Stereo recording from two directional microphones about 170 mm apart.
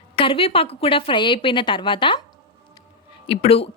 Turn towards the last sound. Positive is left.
turn(degrees=35)  # may be behind; listen again after turning